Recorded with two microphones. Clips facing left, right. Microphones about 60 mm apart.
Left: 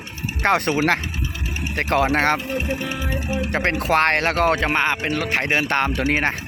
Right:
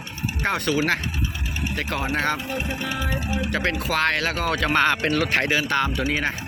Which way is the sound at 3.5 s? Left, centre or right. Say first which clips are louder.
Left 6 dB; left.